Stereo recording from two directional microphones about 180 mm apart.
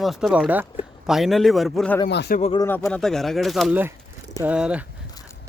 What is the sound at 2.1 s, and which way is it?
Speech, 70° left (ahead or behind).